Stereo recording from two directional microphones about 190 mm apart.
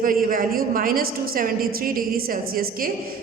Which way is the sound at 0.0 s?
50° right (ahead or behind).